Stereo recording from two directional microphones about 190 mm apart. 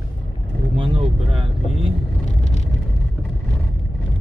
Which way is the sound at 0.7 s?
25° right (ahead or behind).